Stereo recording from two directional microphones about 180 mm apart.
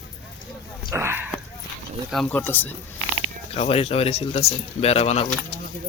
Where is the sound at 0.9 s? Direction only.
15° right (ahead or behind).